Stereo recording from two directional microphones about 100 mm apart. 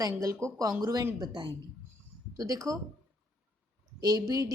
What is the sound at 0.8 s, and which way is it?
Speech, 35° right (ahead or behind).